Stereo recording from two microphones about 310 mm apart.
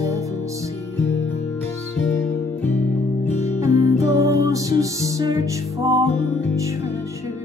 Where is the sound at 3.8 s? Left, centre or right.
Centre.